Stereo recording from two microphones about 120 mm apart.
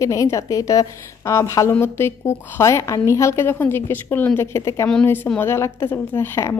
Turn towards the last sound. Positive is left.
turn(degrees=20)  # may be behind; listen again after turning